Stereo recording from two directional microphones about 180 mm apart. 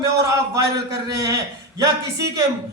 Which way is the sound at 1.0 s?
20° right (ahead or behind).